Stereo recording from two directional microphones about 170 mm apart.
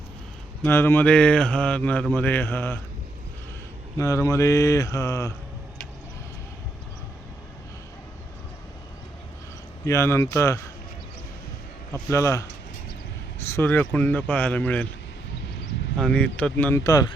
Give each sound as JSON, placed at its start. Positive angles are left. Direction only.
{"t": 0.6, "sound": "speech", "side_deg": 15}
{"t": 3.9, "sound": "speech", "side_deg": 20}
{"t": 9.8, "sound": "speech", "side_deg": 15}
{"t": 12.1, "sound": "speech", "side_deg": 15}
{"t": 13.5, "sound": "speech", "side_deg": 10}
{"t": 16.0, "sound": "speech", "side_deg": 5}